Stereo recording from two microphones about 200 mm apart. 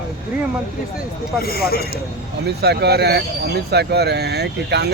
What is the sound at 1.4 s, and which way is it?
Speech, 50° left (ahead or behind).